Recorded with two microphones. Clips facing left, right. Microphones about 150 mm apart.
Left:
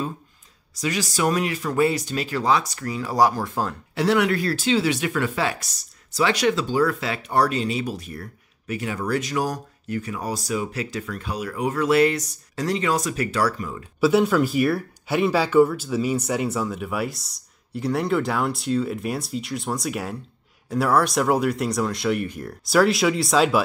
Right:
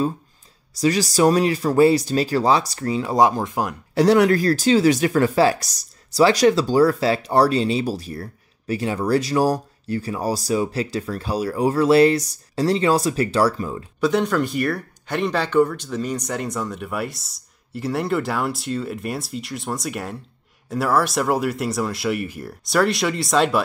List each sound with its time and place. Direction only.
0.7 s speech: 35° right (ahead or behind); by 3.7 s 15° right (ahead or behind)
3.9 s speech: 40° right (ahead or behind)
14.0 s speech: 5° left (ahead or behind)